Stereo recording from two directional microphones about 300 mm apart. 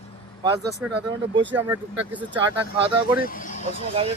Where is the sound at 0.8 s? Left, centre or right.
Centre.